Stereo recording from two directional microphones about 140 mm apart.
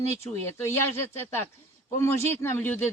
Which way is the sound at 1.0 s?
15° left (ahead or behind).